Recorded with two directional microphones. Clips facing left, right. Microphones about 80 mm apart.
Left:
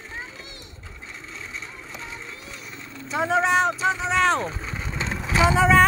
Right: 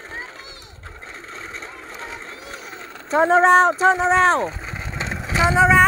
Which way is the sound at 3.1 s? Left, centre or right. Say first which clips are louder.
Right 7 dB; right.